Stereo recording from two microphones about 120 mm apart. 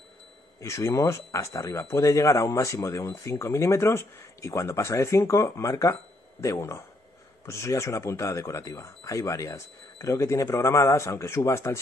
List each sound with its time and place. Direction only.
0.6 s speech: 25° left (ahead or behind)